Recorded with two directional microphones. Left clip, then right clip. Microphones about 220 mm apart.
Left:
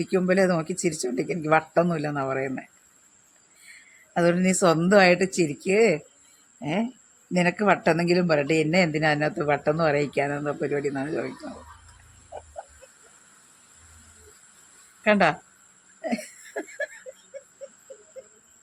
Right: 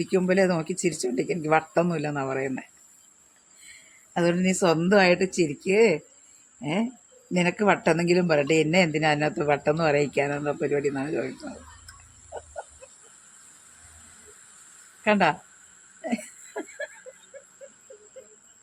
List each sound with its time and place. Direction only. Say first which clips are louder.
0.0 s speech: even; 10° left (ahead or behind)
4.1 s speech: left 2 dB; 10° left (ahead or behind)
6.6 s speech: even; 5° left (ahead or behind)
15.0 s speech: left 1 dB; 25° left (ahead or behind)
16.0 s a sound: left 2 dB; 20° left (ahead or behind)